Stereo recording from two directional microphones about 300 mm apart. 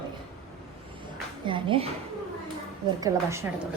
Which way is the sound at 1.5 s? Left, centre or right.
Centre.